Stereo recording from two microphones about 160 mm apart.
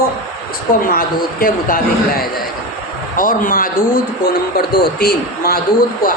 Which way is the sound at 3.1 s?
60° left (ahead or behind).